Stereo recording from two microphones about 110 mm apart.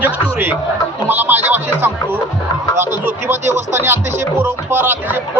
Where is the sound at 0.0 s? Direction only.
15° right (ahead or behind).